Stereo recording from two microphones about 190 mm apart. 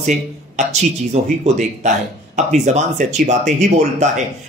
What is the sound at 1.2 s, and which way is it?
Speech, 40° right (ahead or behind).